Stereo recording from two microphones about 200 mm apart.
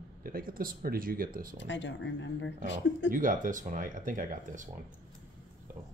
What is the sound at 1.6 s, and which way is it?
Speech, 65° left (ahead or behind).